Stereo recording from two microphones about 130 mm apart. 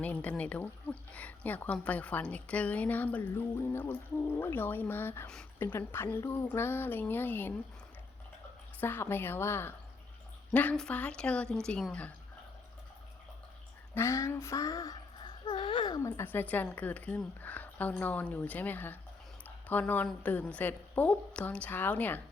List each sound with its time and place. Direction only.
0.0 s speech: 10° left (ahead or behind)
8.8 s speech: 15° left (ahead or behind)
13.9 s speech: 20° left (ahead or behind)
15.4 s speech: 35° left (ahead or behind)
16.0 s speech: 20° left (ahead or behind)